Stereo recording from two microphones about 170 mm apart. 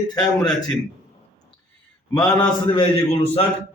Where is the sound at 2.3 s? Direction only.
30° left (ahead or behind).